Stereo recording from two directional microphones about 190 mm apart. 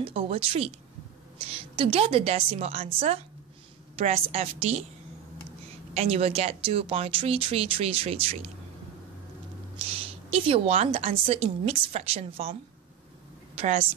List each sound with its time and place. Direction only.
0.0 s a woman's voice: 30° right (ahead or behind)
5.9 s speech: 30° right (ahead or behind)
9.8 s a woman's voice: 30° right (ahead or behind)
13.6 s speech: 30° right (ahead or behind)